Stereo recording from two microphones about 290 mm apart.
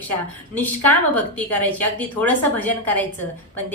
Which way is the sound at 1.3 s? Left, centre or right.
Centre.